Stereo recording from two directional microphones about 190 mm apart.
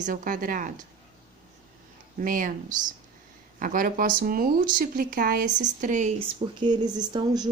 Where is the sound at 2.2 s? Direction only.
45° right (ahead or behind).